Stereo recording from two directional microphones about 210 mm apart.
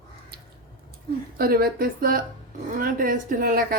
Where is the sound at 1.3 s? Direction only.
45° right (ahead or behind).